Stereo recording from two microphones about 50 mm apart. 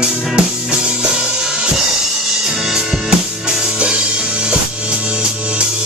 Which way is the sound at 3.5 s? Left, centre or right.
Right.